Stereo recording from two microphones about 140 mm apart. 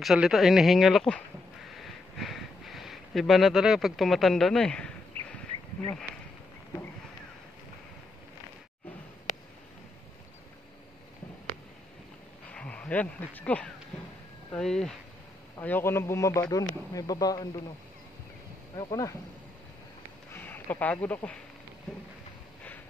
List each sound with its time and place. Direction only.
0.0 s speech: centre (ahead or behind)
1.7 s a sound: centre (ahead or behind)
12.4 s speech: 10° left (ahead or behind)
15.6 s speech: 15° left (ahead or behind)
18.8 s speech: 25° left (ahead or behind)
20.3 s speech: 15° left (ahead or behind)